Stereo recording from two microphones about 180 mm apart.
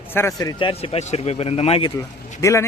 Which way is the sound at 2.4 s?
15° left (ahead or behind).